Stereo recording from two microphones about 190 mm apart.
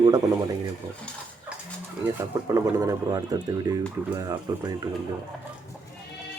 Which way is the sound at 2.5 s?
15° right (ahead or behind).